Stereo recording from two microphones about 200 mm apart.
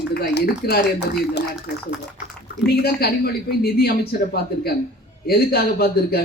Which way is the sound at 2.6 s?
50° left (ahead or behind).